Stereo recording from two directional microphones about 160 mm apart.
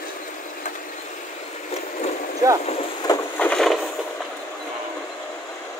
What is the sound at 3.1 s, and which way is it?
Wood, 25° left (ahead or behind).